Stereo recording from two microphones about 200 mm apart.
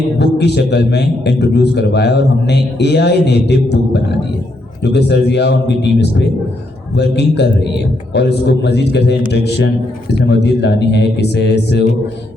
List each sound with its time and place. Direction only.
0.2 s a man's voice: 55° left (ahead or behind)